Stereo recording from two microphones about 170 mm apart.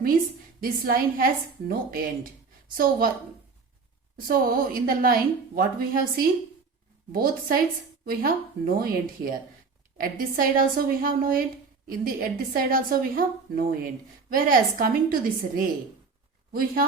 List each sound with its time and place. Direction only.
0.6 s a woman's voice: 60° right (ahead or behind)
4.3 s a woman's voice: 60° right (ahead or behind)